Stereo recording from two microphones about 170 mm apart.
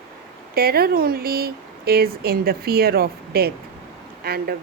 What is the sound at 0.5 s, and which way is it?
Speech, 65° right (ahead or behind).